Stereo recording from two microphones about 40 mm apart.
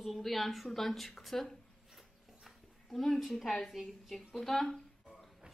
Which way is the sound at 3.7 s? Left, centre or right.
Centre.